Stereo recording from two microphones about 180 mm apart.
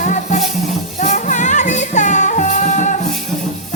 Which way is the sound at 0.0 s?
45° left (ahead or behind).